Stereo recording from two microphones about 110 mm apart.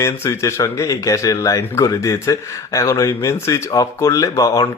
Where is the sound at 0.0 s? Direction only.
25° left (ahead or behind).